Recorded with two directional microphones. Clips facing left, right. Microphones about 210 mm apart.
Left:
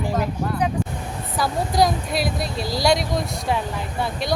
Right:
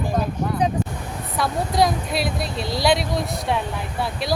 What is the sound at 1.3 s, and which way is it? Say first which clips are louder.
Speech: even; centre (ahead or behind).